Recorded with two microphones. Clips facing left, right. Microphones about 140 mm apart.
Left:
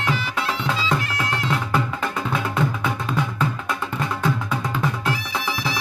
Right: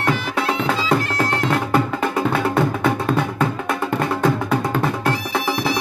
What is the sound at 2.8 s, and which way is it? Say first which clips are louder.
Music: right 6 dB; 55° right (ahead or behind).